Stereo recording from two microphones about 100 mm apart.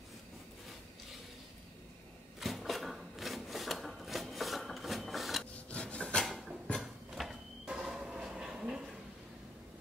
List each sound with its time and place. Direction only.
2.4 s wood: centre (ahead or behind)
5.7 s rub: 10° left (ahead or behind)
6.2 s a sound: centre (ahead or behind)